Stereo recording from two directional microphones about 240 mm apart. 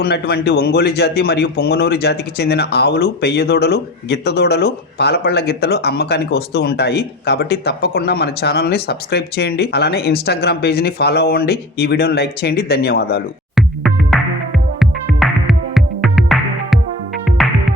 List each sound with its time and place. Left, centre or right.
0.0 s speech: left
13.6 s music: centre